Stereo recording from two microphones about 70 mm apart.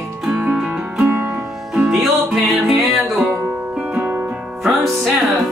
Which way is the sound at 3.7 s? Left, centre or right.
Centre.